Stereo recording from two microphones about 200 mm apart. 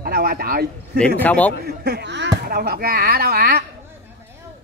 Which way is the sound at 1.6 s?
55° right (ahead or behind).